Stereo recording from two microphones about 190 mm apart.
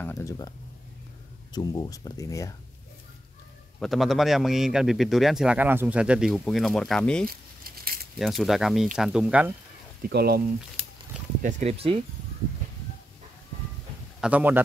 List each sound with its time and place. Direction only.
0.0 s speech: 15° left (ahead or behind)
3.8 s a man's voice: centre (ahead or behind)
7.2 s crumpling: 50° right (ahead or behind)
8.2 s a man's voice: centre (ahead or behind)
10.0 s speech: 55° right (ahead or behind)
11.4 s speech: 35° right (ahead or behind)
14.2 s a man's voice: 10° right (ahead or behind)